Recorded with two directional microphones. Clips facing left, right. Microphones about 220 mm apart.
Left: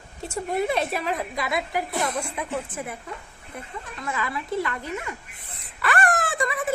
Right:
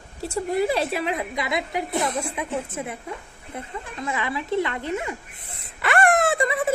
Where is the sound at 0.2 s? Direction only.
35° right (ahead or behind).